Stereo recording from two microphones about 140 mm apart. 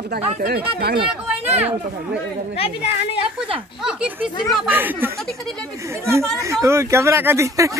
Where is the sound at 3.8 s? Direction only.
10° right (ahead or behind).